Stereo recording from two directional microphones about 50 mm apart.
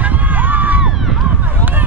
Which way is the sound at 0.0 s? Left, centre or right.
Right.